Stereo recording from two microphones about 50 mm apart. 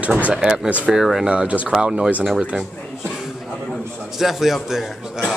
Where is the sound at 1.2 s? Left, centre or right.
Right.